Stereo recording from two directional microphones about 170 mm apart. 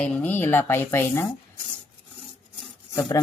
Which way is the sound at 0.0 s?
10° left (ahead or behind).